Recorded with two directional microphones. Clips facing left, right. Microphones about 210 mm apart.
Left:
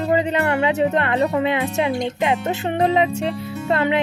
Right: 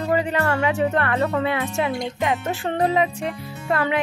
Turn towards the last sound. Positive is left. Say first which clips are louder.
# left 3 dB
turn(degrees=25)  # may be behind; listen again after turning